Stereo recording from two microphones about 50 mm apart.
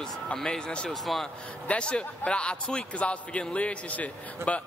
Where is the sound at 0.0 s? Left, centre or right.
Centre.